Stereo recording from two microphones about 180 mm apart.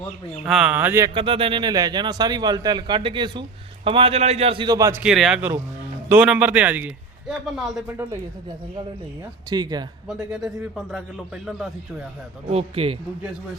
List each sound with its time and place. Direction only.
0.4 s a man's voice: 5° right (ahead or behind)
1.1 s speech: 30° right (ahead or behind)
5.0 s a man's voice: centre (ahead or behind)
9.5 s speech: 20° right (ahead or behind)
10.1 s speech: centre (ahead or behind)
12.5 s speech: 35° right (ahead or behind)